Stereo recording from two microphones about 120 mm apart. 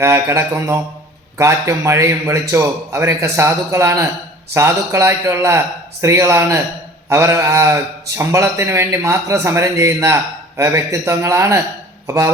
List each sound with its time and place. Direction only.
0.0 s a man's voice: 20° right (ahead or behind)